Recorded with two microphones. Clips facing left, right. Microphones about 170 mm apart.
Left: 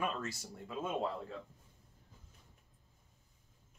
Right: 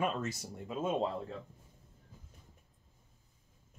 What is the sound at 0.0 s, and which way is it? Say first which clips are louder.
Speech: right 4 dB; 20° right (ahead or behind).